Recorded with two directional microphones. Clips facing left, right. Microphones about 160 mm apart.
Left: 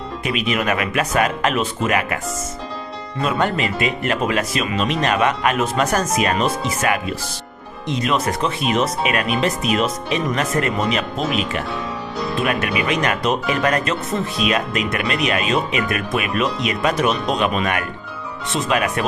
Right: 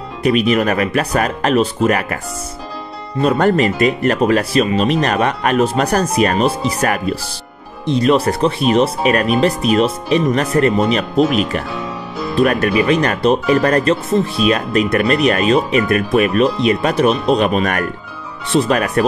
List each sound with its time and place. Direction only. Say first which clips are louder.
0.2 s speech: right 8 dB; 40° right (ahead or behind)
3.2 s speech: right 7 dB; 40° right (ahead or behind)
7.8 s speech: right 7 dB; 35° right (ahead or behind)
12.4 s speech: right 8 dB; 40° right (ahead or behind)